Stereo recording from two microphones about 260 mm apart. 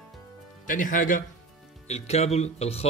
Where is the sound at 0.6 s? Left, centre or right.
Left.